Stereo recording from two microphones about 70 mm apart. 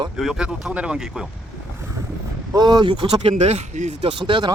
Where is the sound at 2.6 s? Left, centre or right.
Right.